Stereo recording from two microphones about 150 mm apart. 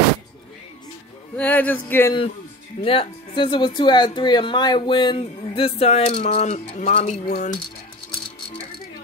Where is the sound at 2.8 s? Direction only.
35° left (ahead or behind).